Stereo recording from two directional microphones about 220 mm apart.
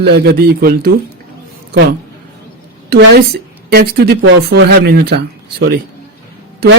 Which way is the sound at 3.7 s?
45° right (ahead or behind).